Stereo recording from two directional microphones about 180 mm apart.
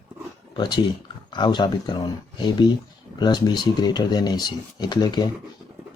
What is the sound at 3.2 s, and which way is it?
Speech, 25° left (ahead or behind).